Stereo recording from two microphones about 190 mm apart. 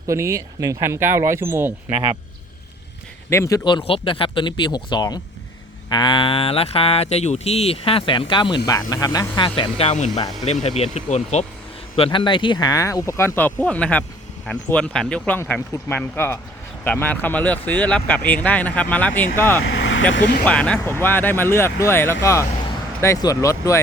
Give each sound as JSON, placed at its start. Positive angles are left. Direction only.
{"t": 0.1, "sound": "speech", "side_deg": -15}
{"t": 3.2, "sound": "speech", "side_deg": 15}
{"t": 19.8, "sound": "vehicle", "side_deg": 80}
{"t": 20.4, "sound": "speech", "side_deg": 5}